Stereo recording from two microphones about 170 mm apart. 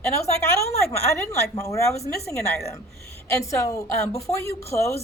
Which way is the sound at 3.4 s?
20° left (ahead or behind).